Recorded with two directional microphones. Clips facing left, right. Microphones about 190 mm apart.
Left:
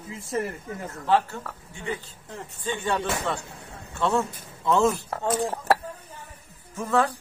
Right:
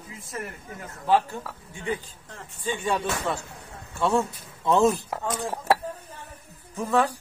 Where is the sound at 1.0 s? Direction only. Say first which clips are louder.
Right 1 dB; 15° right (ahead or behind).